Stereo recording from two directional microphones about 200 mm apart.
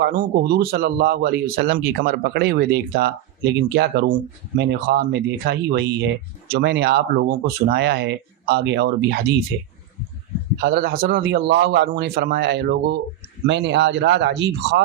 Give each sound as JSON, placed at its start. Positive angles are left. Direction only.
{"t": 0.0, "sound": "speech", "side_deg": -45}
{"t": 10.6, "sound": "speech", "side_deg": -50}